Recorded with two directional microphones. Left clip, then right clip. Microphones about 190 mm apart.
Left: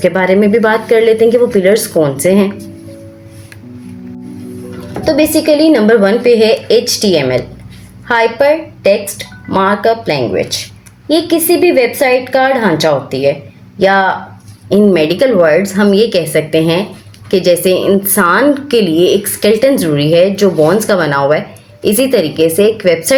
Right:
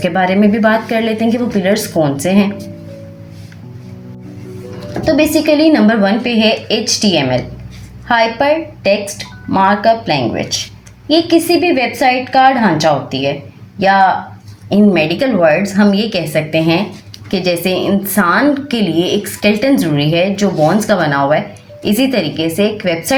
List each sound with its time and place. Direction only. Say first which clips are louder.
0.0 s a woman's voice: left 3 dB; 40° left (ahead or behind)
5.7 s a woman's voice: left 4 dB; 35° left (ahead or behind)
9.5 s a woman's voice: even; 40° left (ahead or behind)